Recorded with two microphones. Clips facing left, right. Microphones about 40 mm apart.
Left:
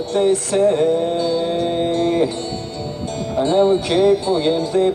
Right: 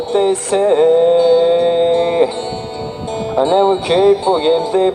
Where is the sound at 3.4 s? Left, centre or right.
Right.